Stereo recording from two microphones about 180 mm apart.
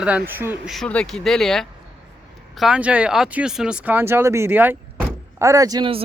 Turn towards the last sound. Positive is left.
turn(degrees=-25)  # may be behind; listen again after turning